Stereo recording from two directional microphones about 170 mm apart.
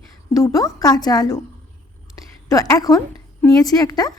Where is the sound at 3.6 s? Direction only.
20° left (ahead or behind).